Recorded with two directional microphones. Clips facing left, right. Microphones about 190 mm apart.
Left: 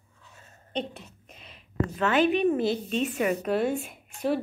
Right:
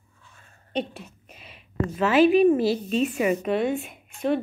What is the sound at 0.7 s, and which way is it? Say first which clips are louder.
A woman's voice: right 3 dB; 10° right (ahead or behind).